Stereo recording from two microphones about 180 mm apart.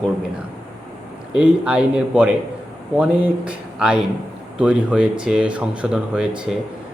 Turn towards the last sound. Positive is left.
turn(degrees=-5)  # may be behind; listen again after turning